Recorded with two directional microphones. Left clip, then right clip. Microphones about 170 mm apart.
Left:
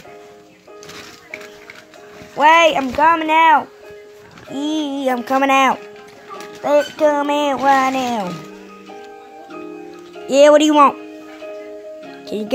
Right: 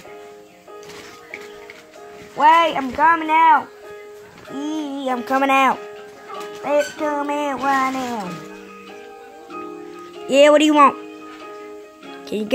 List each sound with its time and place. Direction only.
2.3 s speech: 20° left (ahead or behind)
4.6 s music: 35° left (ahead or behind); by 5.8 s 10° left (ahead or behind)
6.6 s speech: 30° left (ahead or behind)
10.2 s speech: centre (ahead or behind)
12.3 s speech: centre (ahead or behind)